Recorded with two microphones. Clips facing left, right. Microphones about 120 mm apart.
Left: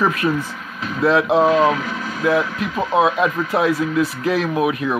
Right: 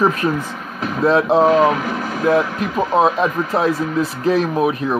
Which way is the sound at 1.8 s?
50° right (ahead or behind).